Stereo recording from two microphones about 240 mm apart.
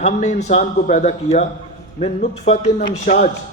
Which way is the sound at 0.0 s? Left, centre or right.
Left.